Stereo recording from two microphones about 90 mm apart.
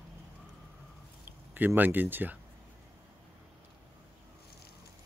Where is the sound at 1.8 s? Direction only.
20° right (ahead or behind).